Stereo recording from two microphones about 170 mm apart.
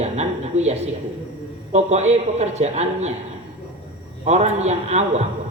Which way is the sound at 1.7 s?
40° right (ahead or behind).